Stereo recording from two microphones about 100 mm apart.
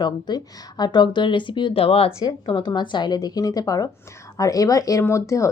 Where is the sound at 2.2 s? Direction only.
50° left (ahead or behind).